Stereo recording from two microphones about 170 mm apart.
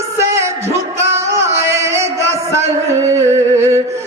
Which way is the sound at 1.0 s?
15° right (ahead or behind).